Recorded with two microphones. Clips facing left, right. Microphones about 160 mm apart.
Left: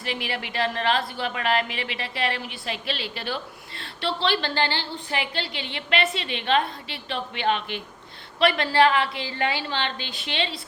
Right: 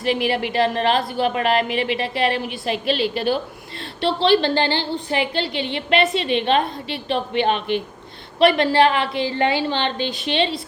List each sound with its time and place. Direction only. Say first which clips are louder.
0.0 s a woman's voice: right 10 dB; 15° right (ahead or behind)